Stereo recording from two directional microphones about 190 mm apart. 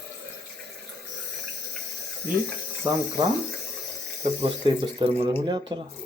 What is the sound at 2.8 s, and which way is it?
Speech, 10° right (ahead or behind).